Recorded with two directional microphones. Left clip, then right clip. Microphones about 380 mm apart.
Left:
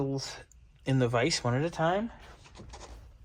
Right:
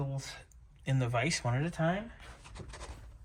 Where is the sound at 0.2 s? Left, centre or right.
Centre.